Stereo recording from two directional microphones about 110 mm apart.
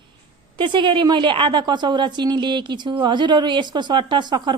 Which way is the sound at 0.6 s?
45° right (ahead or behind).